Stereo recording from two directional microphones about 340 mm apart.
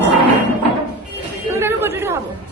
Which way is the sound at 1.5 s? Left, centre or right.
Centre.